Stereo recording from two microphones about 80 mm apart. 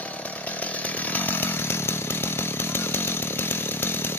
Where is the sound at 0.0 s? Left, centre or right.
Centre.